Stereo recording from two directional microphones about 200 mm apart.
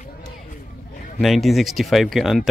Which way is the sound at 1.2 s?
Centre (ahead or behind).